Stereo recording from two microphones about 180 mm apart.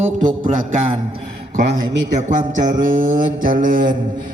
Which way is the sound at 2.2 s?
45° right (ahead or behind).